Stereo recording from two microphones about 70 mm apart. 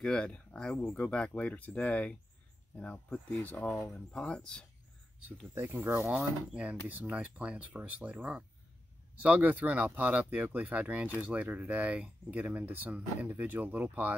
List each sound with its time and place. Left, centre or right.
0.0 s speech: centre
5.8 s speech: right
6.0 s speech: centre